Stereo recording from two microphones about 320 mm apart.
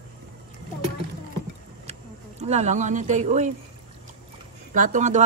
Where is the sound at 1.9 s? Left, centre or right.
Right.